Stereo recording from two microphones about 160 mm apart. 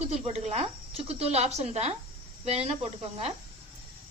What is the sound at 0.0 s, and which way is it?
Speech, 40° right (ahead or behind).